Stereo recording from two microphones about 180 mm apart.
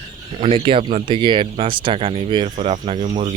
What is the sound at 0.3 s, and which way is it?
Speech, 30° right (ahead or behind).